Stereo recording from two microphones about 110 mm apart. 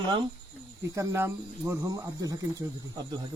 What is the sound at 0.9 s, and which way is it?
Speech, 25° right (ahead or behind).